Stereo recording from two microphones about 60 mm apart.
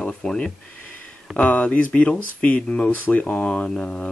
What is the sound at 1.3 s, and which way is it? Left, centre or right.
Speech, left.